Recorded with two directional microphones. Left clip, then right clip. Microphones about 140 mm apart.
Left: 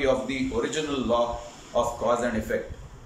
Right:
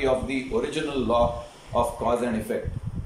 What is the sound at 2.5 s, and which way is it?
Speech, 20° right (ahead or behind).